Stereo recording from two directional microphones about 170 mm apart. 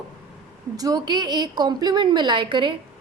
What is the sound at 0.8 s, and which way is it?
A woman's voice, 20° right (ahead or behind).